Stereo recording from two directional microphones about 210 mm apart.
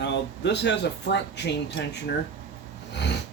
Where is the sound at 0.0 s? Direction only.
55° left (ahead or behind).